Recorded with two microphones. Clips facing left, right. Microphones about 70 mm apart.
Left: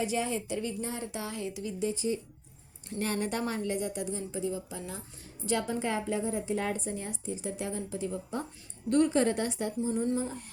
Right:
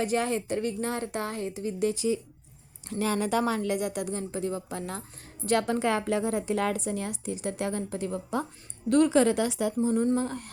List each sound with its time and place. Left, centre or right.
0.0 s speech: right
1.8 s a woman's voice: right
2.9 s a woman's voice: right
5.5 s a woman's voice: right
8.9 s a woman's voice: right
10.2 s a woman's voice: right